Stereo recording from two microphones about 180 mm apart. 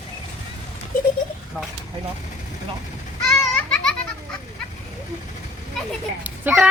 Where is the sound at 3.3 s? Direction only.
5° left (ahead or behind).